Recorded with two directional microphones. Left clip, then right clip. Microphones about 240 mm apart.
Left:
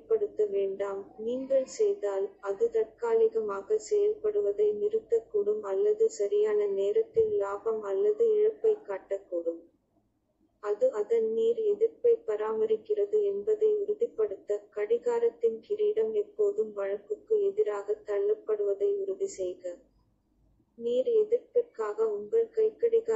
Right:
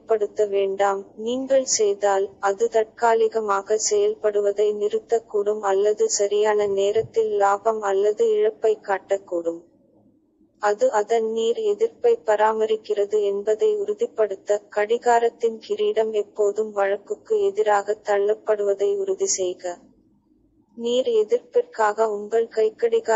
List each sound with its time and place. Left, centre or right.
0.1 s a woman's voice: right
10.6 s a woman's voice: right
20.8 s a woman's voice: right